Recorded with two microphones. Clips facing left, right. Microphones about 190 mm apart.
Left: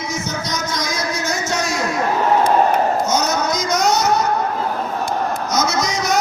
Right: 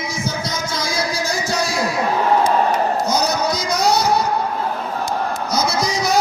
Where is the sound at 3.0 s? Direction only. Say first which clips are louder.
Even; 35° right (ahead or behind).